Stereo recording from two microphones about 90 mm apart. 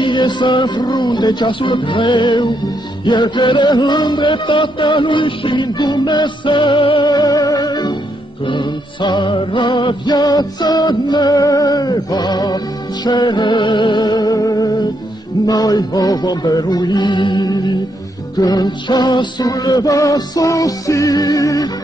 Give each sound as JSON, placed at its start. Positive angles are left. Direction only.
{"t": 0.0, "sound": "music", "side_deg": 60}
{"t": 8.5, "sound": "music", "side_deg": 60}